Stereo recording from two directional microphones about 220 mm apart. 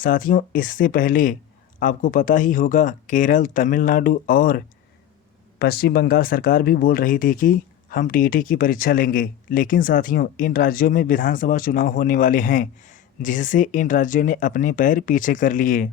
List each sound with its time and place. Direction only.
0.0 s speech: 40° left (ahead or behind)